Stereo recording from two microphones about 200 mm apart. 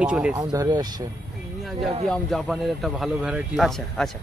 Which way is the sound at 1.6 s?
Centre (ahead or behind).